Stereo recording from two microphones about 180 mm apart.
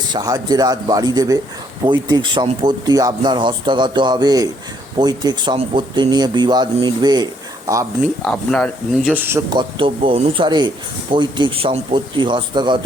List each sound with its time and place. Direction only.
0.1 s speech: 20° right (ahead or behind)
8.0 s speech: 5° left (ahead or behind)
9.0 s speech: 10° right (ahead or behind)
9.5 s speech: 25° right (ahead or behind)